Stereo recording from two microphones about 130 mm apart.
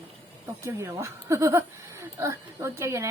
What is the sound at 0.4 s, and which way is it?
Speech, 20° right (ahead or behind).